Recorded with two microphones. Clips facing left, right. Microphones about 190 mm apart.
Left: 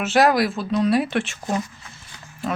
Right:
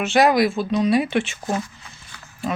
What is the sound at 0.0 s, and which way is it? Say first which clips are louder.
Speech: right 1 dB; centre (ahead or behind).